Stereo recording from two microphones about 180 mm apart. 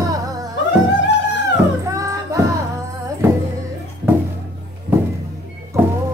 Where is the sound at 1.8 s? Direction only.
20° right (ahead or behind).